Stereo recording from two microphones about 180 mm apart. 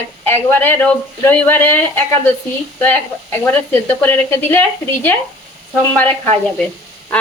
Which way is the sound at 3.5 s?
10° left (ahead or behind).